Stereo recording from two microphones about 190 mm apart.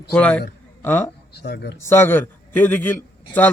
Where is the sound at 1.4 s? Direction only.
60° left (ahead or behind).